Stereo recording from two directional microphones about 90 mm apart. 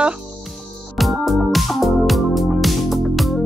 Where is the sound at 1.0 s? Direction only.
Centre (ahead or behind).